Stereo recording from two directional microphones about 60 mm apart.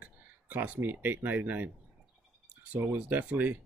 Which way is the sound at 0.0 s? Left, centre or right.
Right.